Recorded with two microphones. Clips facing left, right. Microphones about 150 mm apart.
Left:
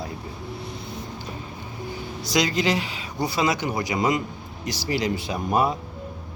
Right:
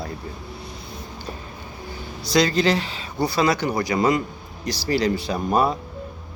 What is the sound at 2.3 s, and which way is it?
Speech, 15° left (ahead or behind).